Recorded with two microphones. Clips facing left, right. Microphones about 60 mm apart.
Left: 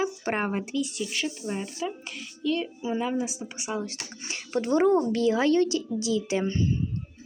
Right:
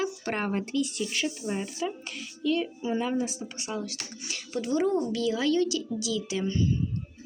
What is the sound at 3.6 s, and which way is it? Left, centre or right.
A woman's voice, left.